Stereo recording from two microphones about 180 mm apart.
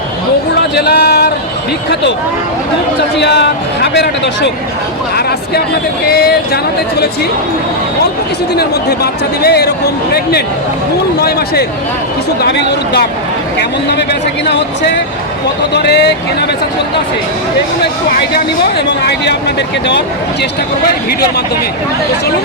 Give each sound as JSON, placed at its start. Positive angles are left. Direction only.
{"t": 0.8, "sound": "a sound", "side_deg": 60}
{"t": 3.2, "sound": "speech", "side_deg": 70}
{"t": 6.1, "sound": "speech", "side_deg": 60}
{"t": 8.5, "sound": "speech", "side_deg": 65}
{"t": 19.2, "sound": "speech", "side_deg": 70}